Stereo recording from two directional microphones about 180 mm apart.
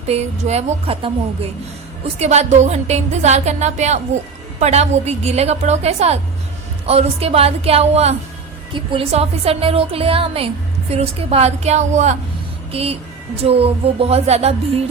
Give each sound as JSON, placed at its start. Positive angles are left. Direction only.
{"t": 0.1, "sound": "music", "side_deg": -35}
{"t": 2.1, "sound": "music", "side_deg": -35}